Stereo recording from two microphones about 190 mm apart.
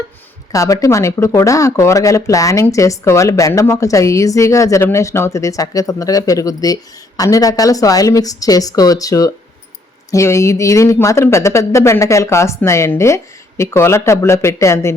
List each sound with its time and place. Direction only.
0.5 s speech: 15° left (ahead or behind)